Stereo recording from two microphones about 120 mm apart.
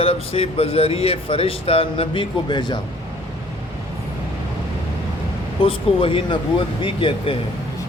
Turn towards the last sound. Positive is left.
turn(degrees=45)  # may be behind; listen again after turning